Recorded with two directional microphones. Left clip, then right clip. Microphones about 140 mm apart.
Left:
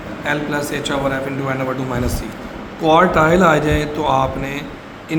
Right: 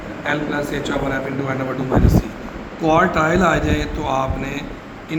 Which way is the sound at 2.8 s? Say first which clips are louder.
Left 3 dB; 30° left (ahead or behind).